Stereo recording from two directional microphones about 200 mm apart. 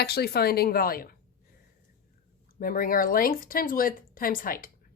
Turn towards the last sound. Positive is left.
turn(degrees=45)  # may be behind; listen again after turning